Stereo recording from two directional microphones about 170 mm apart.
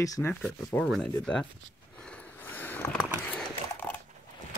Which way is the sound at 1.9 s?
5° left (ahead or behind).